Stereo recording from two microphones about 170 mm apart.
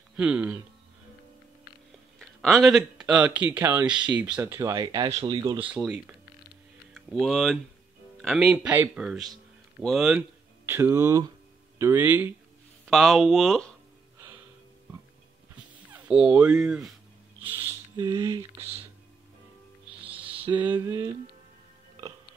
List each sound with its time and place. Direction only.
0.1 s speech: 5° right (ahead or behind)
2.4 s speech: centre (ahead or behind); by 5.7 s 25° right (ahead or behind)
5.7 s speech: 5° right (ahead or behind)
10.6 s speech: 15° right (ahead or behind)
12.8 s speech: centre (ahead or behind)
15.9 s speech: 5° right (ahead or behind)
17.9 s speech: 20° right (ahead or behind)
20.6 s speech: 15° right (ahead or behind)